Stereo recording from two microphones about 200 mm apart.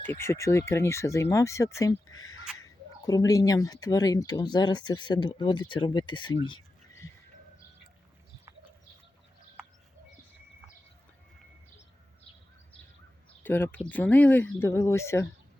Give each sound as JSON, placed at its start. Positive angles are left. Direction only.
{"t": 0.2, "sound": "speech", "side_deg": 15}
{"t": 13.4, "sound": "speech", "side_deg": 10}